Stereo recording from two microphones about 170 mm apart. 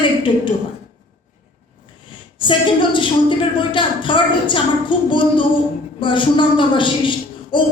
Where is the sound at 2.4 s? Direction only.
30° left (ahead or behind).